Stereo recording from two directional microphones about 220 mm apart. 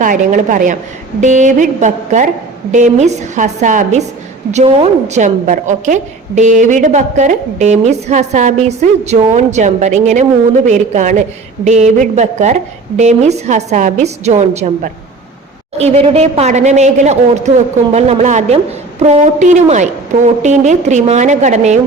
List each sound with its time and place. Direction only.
0.0 s a woman's voice: 35° right (ahead or behind)
15.8 s a woman's voice: 30° right (ahead or behind)